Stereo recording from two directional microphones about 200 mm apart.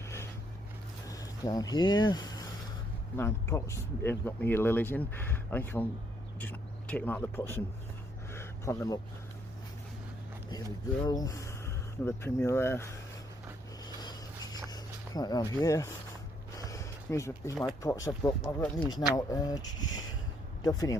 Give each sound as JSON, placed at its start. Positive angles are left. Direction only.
{"t": 0.0, "sound": "vehicle", "side_deg": 15}
{"t": 1.0, "sound": "speech", "side_deg": 15}
{"t": 8.3, "sound": "a sound", "side_deg": 15}
{"t": 11.0, "sound": "speech", "side_deg": 20}
{"t": 13.8, "sound": "a sound", "side_deg": 20}
{"t": 17.8, "sound": "speech", "side_deg": 15}
{"t": 20.7, "sound": "speech", "side_deg": 20}